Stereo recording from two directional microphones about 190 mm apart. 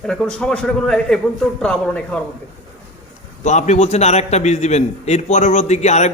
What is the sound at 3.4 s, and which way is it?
A man's voice, 40° left (ahead or behind).